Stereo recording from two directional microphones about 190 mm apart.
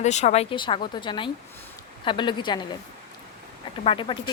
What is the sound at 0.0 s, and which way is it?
Speech, 35° left (ahead or behind).